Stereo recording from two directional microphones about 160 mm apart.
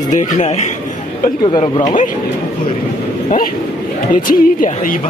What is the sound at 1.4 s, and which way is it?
Speech, 30° left (ahead or behind).